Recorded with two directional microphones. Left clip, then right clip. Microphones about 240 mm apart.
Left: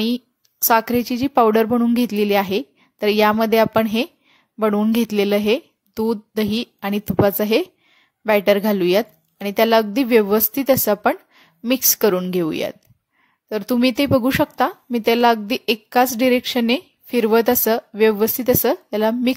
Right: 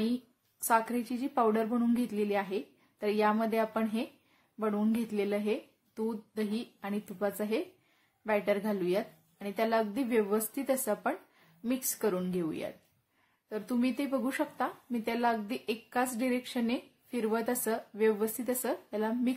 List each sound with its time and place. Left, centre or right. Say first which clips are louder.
0.7 s a woman's voice: left 12 dB; left